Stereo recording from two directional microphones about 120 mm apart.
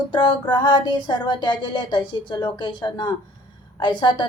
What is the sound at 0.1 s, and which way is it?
A woman's voice, 40° left (ahead or behind).